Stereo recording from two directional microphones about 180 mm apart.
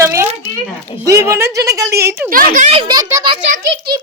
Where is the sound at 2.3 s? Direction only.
50° right (ahead or behind).